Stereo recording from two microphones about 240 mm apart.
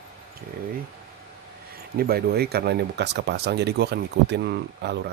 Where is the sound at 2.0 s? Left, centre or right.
Right.